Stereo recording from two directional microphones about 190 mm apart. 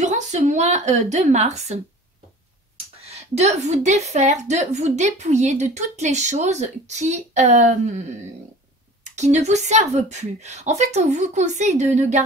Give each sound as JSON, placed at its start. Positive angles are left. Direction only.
{"t": 0.0, "sound": "a woman's voice", "side_deg": -40}
{"t": 3.0, "sound": "a woman's voice", "side_deg": -35}
{"t": 9.0, "sound": "a woman's voice", "side_deg": -35}